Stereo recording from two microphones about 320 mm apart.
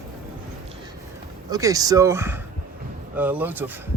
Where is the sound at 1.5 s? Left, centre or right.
Centre.